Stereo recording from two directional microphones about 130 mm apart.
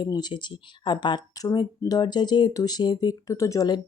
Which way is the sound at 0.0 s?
35° left (ahead or behind).